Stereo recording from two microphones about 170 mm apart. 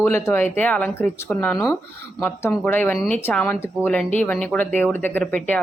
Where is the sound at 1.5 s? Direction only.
20° left (ahead or behind).